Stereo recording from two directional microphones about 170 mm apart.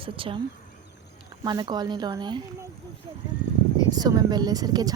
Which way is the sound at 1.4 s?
25° right (ahead or behind).